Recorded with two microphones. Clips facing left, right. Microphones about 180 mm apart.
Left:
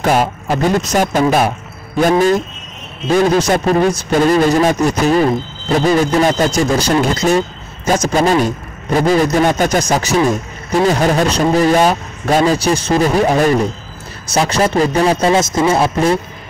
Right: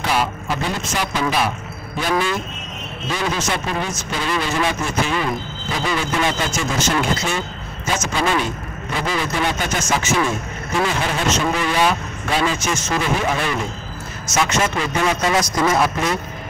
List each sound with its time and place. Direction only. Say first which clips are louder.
0.0 s a man's voice: left 7 dB; 45° left (ahead or behind); by 16.2 s 30° left (ahead or behind)